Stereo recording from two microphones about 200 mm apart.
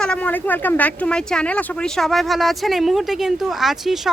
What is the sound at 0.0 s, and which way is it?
A woman's voice, 5° left (ahead or behind).